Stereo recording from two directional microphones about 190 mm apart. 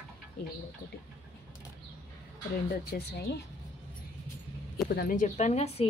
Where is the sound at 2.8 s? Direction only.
60° left (ahead or behind).